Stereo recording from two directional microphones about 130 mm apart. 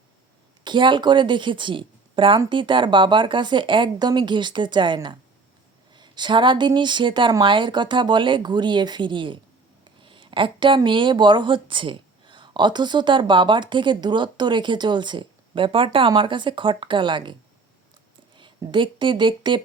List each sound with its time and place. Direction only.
0.6 s speech: 35° right (ahead or behind)
9.8 s a sound: 40° right (ahead or behind)
10.8 s speech: 40° right (ahead or behind)
18.3 s speech: 40° right (ahead or behind)